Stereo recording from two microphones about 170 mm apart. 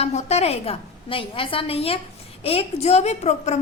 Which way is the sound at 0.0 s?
40° left (ahead or behind).